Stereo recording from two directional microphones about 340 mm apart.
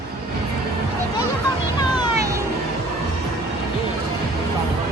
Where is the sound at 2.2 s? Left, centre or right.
Centre.